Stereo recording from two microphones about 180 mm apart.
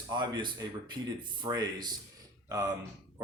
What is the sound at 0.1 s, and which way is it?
Speech, 25° right (ahead or behind).